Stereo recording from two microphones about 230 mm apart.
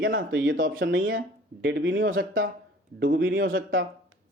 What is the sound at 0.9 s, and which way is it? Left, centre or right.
Speech, right.